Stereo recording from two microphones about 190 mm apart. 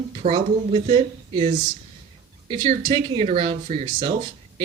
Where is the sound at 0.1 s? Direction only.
30° right (ahead or behind).